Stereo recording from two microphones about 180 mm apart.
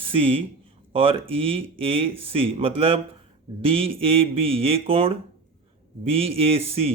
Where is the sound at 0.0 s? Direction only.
30° right (ahead or behind).